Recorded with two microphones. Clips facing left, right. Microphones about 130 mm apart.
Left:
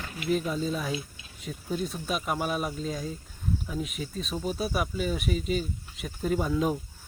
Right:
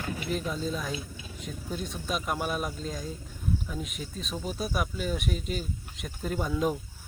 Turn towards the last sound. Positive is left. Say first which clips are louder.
# left 2 dB
turn(degrees=0)  # may be behind; listen again after turning